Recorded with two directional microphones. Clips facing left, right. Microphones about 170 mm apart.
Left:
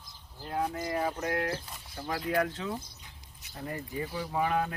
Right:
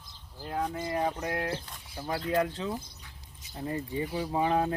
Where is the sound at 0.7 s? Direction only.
25° right (ahead or behind).